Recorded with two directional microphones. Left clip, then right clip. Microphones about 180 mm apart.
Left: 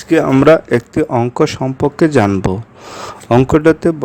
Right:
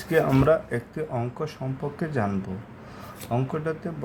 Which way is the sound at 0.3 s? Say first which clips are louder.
Left 13 dB; 40° left (ahead or behind).